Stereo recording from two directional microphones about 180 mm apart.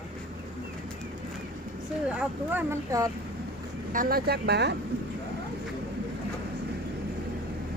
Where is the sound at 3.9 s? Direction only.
55° right (ahead or behind).